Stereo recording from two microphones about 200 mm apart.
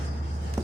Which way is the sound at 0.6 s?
15° right (ahead or behind).